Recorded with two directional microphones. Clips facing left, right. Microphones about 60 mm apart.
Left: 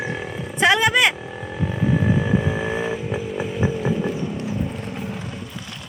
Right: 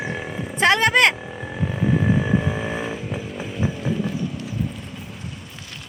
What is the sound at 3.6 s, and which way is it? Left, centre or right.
Vehicle, centre.